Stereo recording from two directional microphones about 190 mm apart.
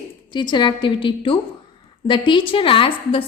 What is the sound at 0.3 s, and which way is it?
A woman's voice, 25° left (ahead or behind).